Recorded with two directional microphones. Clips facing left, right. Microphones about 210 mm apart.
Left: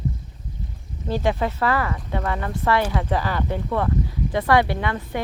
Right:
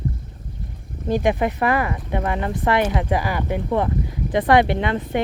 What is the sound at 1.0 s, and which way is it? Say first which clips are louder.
Speech: right 3 dB; 15° right (ahead or behind).